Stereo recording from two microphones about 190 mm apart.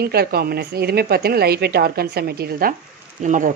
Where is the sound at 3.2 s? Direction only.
40° right (ahead or behind).